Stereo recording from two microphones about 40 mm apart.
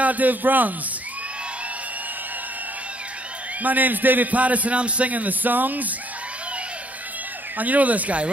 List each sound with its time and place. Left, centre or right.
0.0 s a man's voice: right
3.6 s a man's voice: right
7.5 s speech: right